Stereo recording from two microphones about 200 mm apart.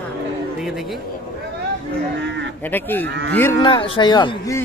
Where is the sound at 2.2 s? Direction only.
60° right (ahead or behind).